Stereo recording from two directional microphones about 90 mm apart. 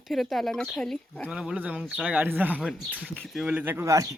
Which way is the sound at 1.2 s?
10° right (ahead or behind).